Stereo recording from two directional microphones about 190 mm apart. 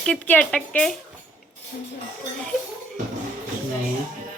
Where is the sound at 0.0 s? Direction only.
5° left (ahead or behind).